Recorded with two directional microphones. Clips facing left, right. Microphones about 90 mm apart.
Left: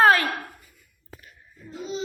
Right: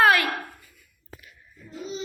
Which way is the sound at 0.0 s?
30° left (ahead or behind).